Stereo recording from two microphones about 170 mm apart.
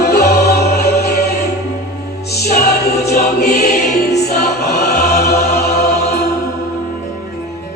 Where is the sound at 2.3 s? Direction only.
70° left (ahead or behind).